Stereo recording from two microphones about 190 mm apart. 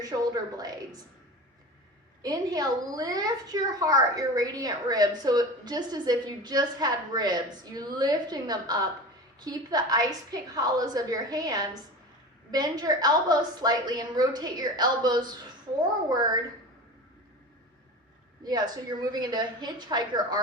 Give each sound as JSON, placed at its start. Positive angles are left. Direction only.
{"t": 0.0, "sound": "a woman's voice", "side_deg": -20}
{"t": 2.2, "sound": "a woman's voice", "side_deg": -20}
{"t": 18.4, "sound": "a woman's voice", "side_deg": -20}